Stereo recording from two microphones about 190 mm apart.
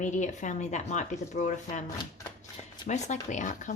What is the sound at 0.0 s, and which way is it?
Speech, 40° left (ahead or behind).